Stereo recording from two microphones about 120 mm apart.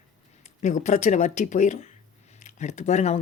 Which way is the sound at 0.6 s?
90° left.